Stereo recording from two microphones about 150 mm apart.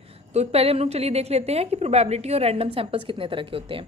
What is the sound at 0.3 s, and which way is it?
A woman's voice, 45° right (ahead or behind).